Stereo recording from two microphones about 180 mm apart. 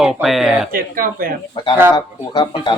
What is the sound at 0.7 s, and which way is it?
Speech, 50° right (ahead or behind).